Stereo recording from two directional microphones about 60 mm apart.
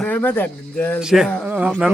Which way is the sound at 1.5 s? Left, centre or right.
Right.